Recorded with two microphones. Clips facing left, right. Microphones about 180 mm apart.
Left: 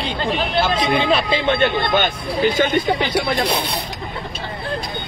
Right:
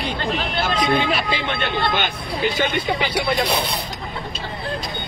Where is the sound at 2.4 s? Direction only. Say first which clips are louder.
Left 4 dB; 45° left (ahead or behind).